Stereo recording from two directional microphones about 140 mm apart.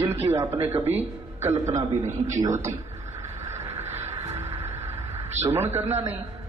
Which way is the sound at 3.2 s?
20° right (ahead or behind).